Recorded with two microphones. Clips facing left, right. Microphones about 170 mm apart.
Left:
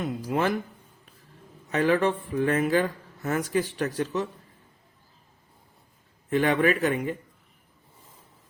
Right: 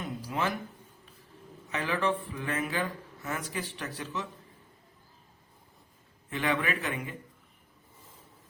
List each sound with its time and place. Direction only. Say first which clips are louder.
0.0 s speech: left 6 dB; 50° left (ahead or behind)
1.7 s speech: left 7 dB; 45° left (ahead or behind)
6.3 s speech: left 8 dB; 45° left (ahead or behind)